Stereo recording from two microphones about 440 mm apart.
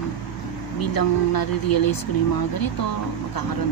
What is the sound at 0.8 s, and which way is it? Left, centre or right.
Speech, left.